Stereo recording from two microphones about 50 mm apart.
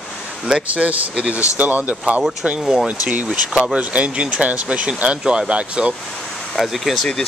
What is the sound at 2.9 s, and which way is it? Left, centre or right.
Speech, right.